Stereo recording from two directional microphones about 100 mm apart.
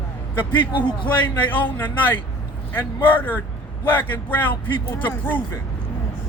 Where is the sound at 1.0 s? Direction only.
15° left (ahead or behind).